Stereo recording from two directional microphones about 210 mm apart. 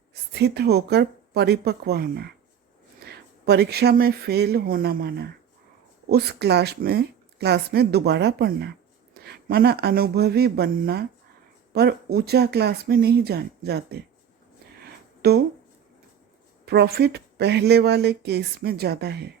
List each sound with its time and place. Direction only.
0.1 s speech: 50° right (ahead or behind)
15.2 s speech: 50° right (ahead or behind)
16.6 s speech: 50° right (ahead or behind)